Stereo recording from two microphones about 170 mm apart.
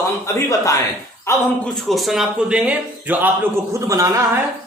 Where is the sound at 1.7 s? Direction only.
Centre (ahead or behind).